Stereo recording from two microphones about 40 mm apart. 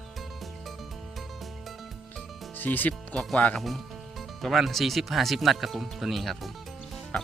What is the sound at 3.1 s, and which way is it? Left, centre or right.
Speech, left.